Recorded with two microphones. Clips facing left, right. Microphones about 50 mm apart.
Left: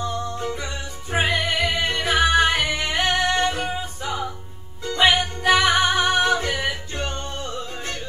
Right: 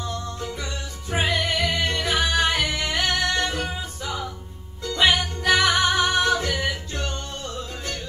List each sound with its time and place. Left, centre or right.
0.0 s music: centre